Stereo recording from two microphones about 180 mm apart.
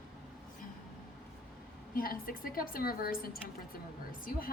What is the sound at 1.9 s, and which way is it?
A woman's voice, 55° left (ahead or behind).